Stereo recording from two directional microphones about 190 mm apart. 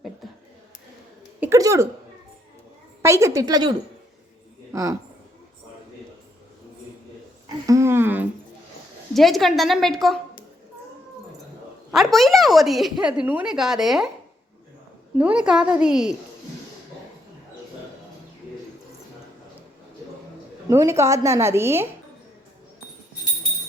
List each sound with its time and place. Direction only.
1.4 s a sound: 15° right (ahead or behind)
3.0 s a woman's voice: 15° right (ahead or behind)
7.4 s a sound: 15° right (ahead or behind)
9.1 s a woman's voice: centre (ahead or behind)
11.9 s a woman's voice: centre (ahead or behind)
15.2 s a woman's voice: 5° right (ahead or behind)
20.7 s a woman's voice: 15° right (ahead or behind)